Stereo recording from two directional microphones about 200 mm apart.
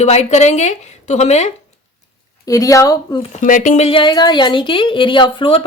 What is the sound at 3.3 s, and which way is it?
Speech, 40° left (ahead or behind).